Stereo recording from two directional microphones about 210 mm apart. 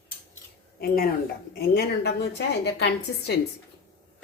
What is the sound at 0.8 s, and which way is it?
A woman's voice, 45° left (ahead or behind).